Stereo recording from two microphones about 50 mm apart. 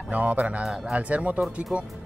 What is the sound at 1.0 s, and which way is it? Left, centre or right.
Speech, right.